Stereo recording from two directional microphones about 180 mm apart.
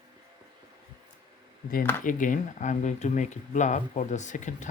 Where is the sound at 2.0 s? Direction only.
45° left (ahead or behind).